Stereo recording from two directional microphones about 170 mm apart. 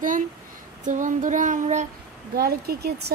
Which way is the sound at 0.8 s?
50° right (ahead or behind).